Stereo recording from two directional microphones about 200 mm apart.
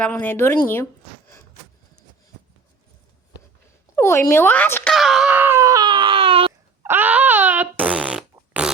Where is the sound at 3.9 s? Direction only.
15° left (ahead or behind).